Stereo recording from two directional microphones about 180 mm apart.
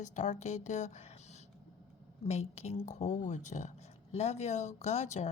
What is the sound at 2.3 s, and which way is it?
Speech, 40° left (ahead or behind).